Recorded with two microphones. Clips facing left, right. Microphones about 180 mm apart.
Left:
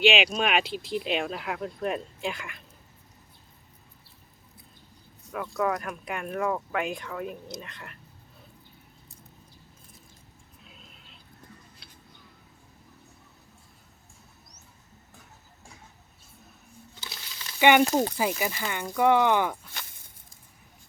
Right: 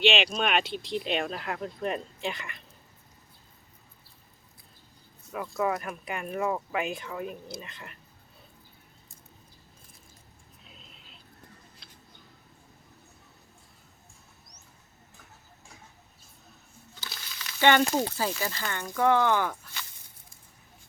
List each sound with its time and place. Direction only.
0.0 s speech: 5° left (ahead or behind)
5.3 s speech: 5° right (ahead or behind)
10.6 s vehicle: centre (ahead or behind)
17.0 s a sound: 25° left (ahead or behind)
17.6 s speech: 15° left (ahead or behind)